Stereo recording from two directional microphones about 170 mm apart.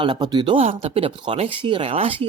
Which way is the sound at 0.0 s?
25° right (ahead or behind).